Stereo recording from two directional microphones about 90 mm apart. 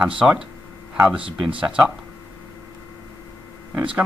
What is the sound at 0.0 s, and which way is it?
Speech, 10° right (ahead or behind).